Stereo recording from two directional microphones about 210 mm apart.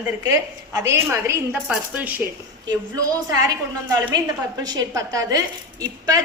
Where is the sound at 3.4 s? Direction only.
15° right (ahead or behind).